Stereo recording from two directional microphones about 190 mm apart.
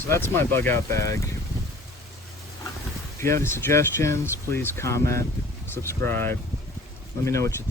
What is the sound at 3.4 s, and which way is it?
Speech, 15° left (ahead or behind).